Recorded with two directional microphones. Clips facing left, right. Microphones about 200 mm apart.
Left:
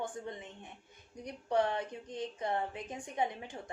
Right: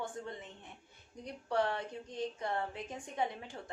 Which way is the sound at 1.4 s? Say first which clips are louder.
Left 2 dB; 20° left (ahead or behind).